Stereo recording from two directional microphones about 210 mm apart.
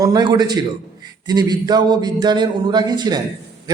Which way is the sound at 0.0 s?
20° right (ahead or behind).